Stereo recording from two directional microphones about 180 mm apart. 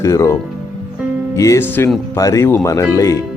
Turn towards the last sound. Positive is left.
turn(degrees=15)  # may be behind; listen again after turning